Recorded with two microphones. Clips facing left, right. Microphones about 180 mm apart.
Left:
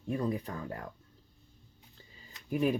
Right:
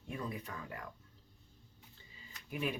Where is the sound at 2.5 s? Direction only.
40° left (ahead or behind).